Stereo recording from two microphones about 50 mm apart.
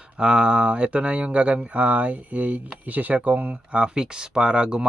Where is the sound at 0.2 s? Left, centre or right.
Centre.